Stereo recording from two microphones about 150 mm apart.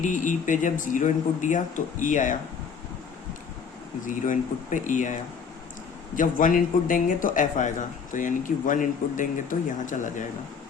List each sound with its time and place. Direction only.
0.0 s speech: 55° left (ahead or behind)
4.0 s speech: 60° left (ahead or behind)
6.1 s speech: 65° left (ahead or behind)